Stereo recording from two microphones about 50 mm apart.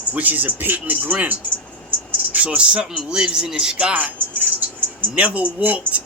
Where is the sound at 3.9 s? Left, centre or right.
Right.